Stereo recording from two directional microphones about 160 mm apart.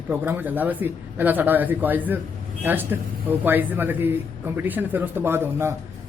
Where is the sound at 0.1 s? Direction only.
10° right (ahead or behind).